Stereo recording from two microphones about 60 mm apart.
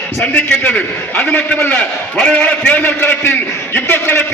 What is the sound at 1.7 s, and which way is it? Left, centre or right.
A man's voice, centre.